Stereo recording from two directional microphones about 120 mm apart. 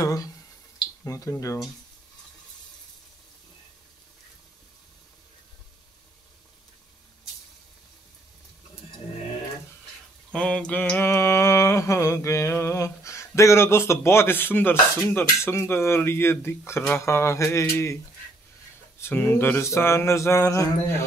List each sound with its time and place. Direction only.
0.0 s a sound: 30° left (ahead or behind)
1.0 s mantra: 25° left (ahead or behind)
10.3 s mantra: 10° left (ahead or behind)
18.9 s mantra: 20° left (ahead or behind)